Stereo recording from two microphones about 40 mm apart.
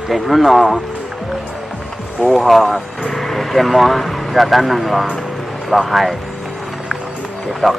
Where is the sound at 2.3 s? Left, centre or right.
Centre.